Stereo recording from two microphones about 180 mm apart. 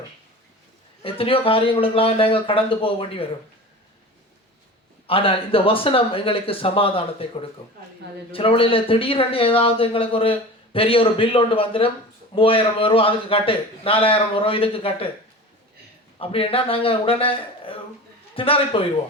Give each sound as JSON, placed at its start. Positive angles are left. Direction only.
{"t": 1.0, "sound": "speech", "side_deg": 30}
{"t": 5.0, "sound": "speech", "side_deg": 30}
{"t": 8.3, "sound": "speech", "side_deg": 30}
{"t": 16.1, "sound": "a man's voice", "side_deg": 30}